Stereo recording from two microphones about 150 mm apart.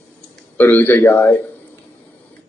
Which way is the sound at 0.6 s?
15° left (ahead or behind).